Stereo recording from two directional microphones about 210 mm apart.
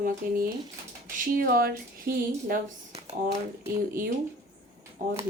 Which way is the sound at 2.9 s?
30° right (ahead or behind).